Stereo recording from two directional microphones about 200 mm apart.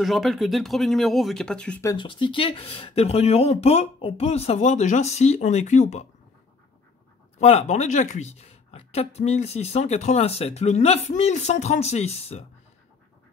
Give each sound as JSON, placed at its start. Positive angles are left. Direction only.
{"t": 0.0, "sound": "speech", "side_deg": 0}
{"t": 1.9, "sound": "speech", "side_deg": 25}
{"t": 7.3, "sound": "speech", "side_deg": 35}